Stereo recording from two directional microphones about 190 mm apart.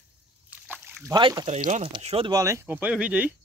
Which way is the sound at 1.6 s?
40° right (ahead or behind).